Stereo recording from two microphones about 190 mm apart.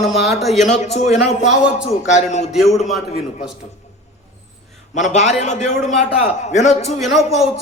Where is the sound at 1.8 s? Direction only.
40° left (ahead or behind).